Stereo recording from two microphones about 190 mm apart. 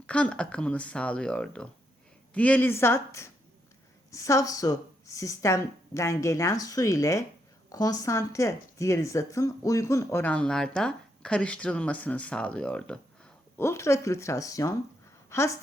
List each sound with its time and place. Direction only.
0.1 s speech: 5° left (ahead or behind)